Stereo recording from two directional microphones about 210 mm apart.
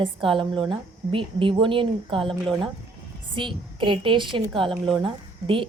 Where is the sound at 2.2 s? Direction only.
Centre (ahead or behind).